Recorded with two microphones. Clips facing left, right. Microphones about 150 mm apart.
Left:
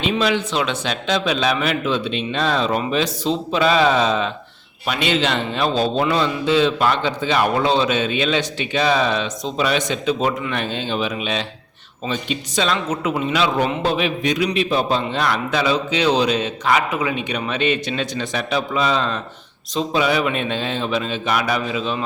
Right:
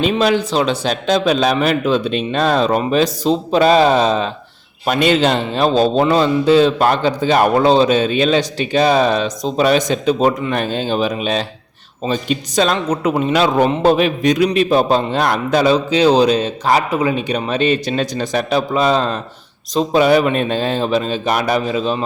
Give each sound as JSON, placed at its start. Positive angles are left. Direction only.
{"t": 0.0, "sound": "speech", "side_deg": -45}